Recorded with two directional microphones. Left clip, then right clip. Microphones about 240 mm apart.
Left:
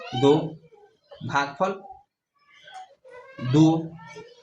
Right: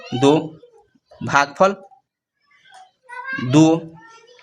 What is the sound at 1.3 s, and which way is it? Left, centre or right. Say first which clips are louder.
Speech: right 9 dB; right.